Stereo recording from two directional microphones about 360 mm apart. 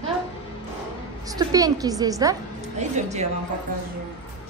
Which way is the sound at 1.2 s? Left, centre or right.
Centre.